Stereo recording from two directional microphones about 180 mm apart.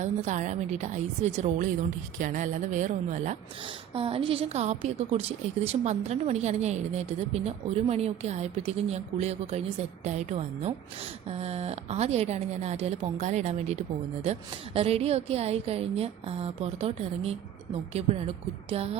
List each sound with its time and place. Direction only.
0.0 s a woman's voice: 40° right (ahead or behind)
3.9 s a woman's voice: 30° right (ahead or behind)